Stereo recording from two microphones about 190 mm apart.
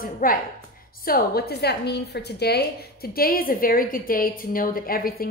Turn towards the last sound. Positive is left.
turn(degrees=50)  # may be behind; listen again after turning